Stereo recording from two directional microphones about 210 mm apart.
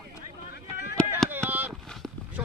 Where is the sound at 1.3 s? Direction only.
10° right (ahead or behind).